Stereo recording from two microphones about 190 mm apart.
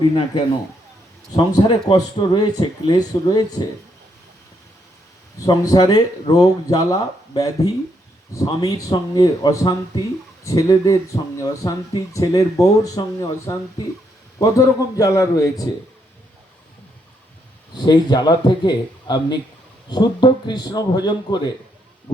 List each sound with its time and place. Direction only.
1.4 s a man's voice: 20° left (ahead or behind)
5.4 s a man's voice: 20° left (ahead or behind)
17.7 s a man's voice: 20° left (ahead or behind)